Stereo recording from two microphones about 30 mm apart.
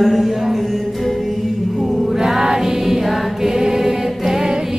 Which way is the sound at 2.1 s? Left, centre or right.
Centre.